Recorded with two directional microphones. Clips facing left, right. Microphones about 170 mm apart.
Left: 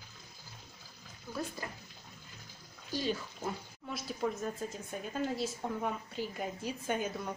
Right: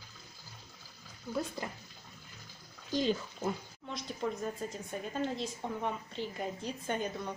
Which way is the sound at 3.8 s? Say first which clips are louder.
Left 1 dB; 5° left (ahead or behind).